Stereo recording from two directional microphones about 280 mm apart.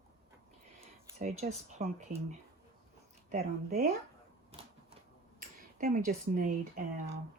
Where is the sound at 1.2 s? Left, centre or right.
Right.